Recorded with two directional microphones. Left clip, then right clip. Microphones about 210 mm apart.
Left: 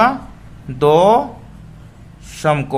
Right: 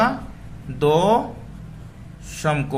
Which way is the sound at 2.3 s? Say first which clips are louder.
Left 6 dB; 20° left (ahead or behind).